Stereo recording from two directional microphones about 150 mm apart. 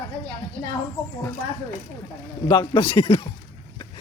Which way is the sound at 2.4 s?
30° left (ahead or behind).